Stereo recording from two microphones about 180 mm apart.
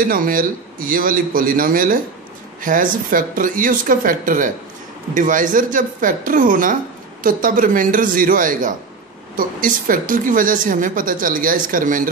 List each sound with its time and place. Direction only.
0.0 s a woman's voice: 50° right (ahead or behind)